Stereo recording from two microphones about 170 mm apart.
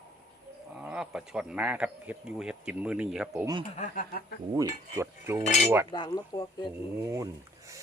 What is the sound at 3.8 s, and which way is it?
Speech, 55° left (ahead or behind).